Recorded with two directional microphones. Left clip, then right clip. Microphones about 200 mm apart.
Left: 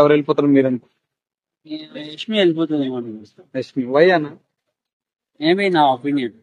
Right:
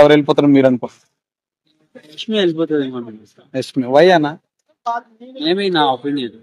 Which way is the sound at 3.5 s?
55° right (ahead or behind).